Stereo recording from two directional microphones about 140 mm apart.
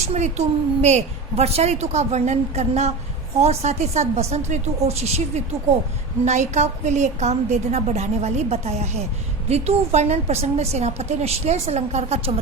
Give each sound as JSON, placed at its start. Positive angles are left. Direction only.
{"t": 0.1, "sound": "a woman's voice", "side_deg": -55}